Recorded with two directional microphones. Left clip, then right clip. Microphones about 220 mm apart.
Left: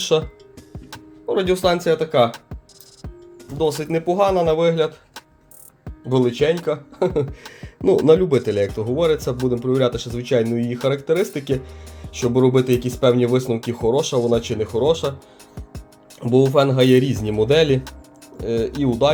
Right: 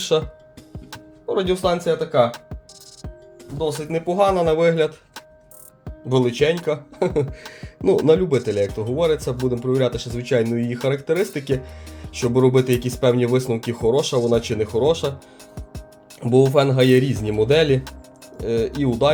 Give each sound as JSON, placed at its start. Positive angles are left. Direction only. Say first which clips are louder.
{"t": 0.0, "sound": "speech", "louder": "left 1 dB", "side_deg": 10}
{"t": 1.3, "sound": "speech", "louder": "left 2 dB", "side_deg": 15}
{"t": 3.6, "sound": "speech", "louder": "left 3 dB", "side_deg": 30}
{"t": 4.1, "sound": "speech", "louder": "even", "side_deg": 5}
{"t": 16.2, "sound": "speech", "louder": "even", "side_deg": 0}